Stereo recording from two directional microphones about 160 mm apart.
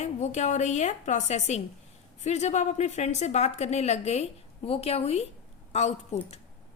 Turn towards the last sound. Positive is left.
turn(degrees=45)  # may be behind; listen again after turning